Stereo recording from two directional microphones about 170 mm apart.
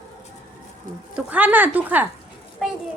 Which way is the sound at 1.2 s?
10° right (ahead or behind).